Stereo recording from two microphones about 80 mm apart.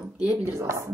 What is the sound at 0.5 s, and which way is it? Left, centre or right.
Speech, right.